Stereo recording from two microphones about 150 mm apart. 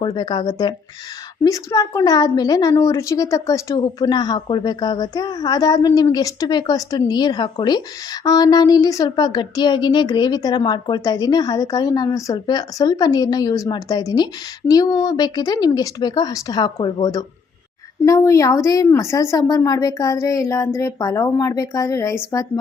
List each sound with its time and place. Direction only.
0.0 s a woman's voice: 30° left (ahead or behind)